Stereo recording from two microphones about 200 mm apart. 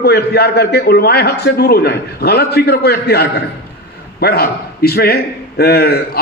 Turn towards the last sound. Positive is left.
turn(degrees=50)  # may be behind; listen again after turning